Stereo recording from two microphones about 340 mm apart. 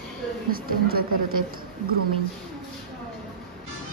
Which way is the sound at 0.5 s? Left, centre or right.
Right.